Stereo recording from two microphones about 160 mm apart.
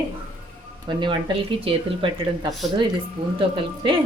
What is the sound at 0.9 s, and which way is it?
Speech, 30° right (ahead or behind).